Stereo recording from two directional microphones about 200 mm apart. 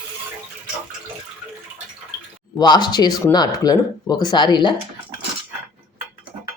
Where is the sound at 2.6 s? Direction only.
20° left (ahead or behind).